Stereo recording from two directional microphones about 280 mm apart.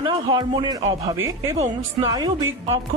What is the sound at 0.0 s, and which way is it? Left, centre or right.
Speech, centre.